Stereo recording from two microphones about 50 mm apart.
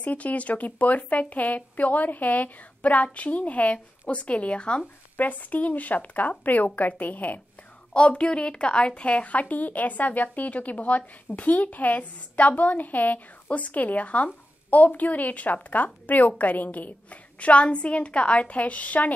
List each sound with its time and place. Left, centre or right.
0.0 s a woman's voice: left
5.1 s a woman's voice: left
7.9 s a woman's voice: left